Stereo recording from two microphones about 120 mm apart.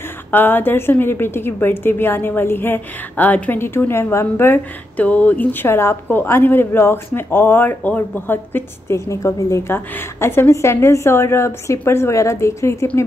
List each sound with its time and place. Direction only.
0.3 s a woman's voice: 15° left (ahead or behind)